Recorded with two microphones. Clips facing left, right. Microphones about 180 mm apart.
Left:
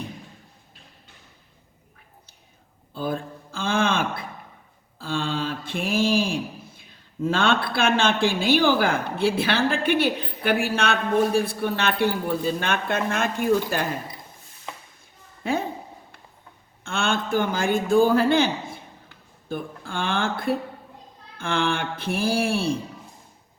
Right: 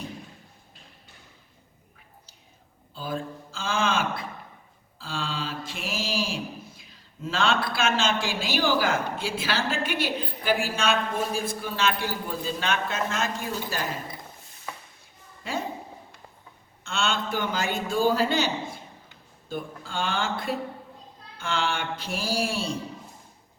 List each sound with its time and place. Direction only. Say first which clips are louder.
2.9 s a sound: left 4 dB; 55° left (ahead or behind)
4.9 s mantra: left 6 dB; 55° left (ahead or behind)
7.2 s a man's voice: left 4 dB; 55° left (ahead or behind)
15.4 s a man's voice: left 6 dB; 55° left (ahead or behind)
16.8 s a man's voice: left 3 dB; 55° left (ahead or behind)